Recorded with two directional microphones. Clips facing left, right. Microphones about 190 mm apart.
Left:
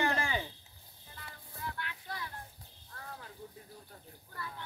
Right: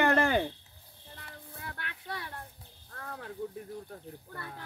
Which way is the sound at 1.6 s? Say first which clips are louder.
Left 3 dB; 60° right (ahead or behind).